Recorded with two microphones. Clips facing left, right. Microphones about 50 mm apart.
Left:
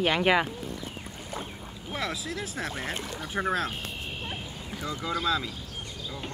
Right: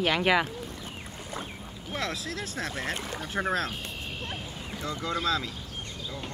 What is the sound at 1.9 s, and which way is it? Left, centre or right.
Speech, centre.